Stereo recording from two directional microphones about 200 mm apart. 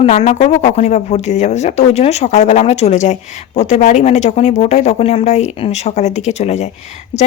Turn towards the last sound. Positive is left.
turn(degrees=35)  # may be behind; listen again after turning